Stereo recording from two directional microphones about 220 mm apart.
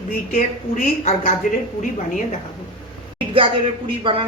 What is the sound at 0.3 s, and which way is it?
Speech, 40° left (ahead or behind).